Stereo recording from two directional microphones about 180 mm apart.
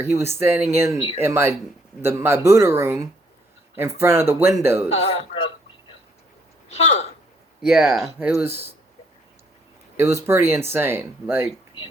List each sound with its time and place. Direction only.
0.0 s speech: 15° right (ahead or behind)
4.9 s speech: 35° left (ahead or behind)
6.7 s speech: 35° left (ahead or behind)
7.7 s speech: centre (ahead or behind)
8.3 s speech: 15° right (ahead or behind)
10.0 s speech: 15° right (ahead or behind)